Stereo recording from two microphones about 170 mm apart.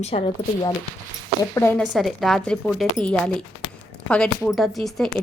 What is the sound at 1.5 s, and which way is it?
Speech, 15° left (ahead or behind).